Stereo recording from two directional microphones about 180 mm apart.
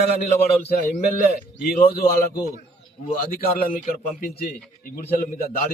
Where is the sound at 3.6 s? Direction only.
50° left (ahead or behind).